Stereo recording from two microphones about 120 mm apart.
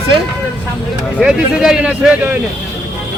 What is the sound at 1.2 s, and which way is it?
Speech, 5° right (ahead or behind).